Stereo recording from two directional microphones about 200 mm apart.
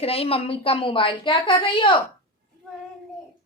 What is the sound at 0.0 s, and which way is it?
A woman's voice, 30° left (ahead or behind).